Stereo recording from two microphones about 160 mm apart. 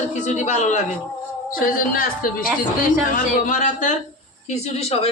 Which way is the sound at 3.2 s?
55° left (ahead or behind).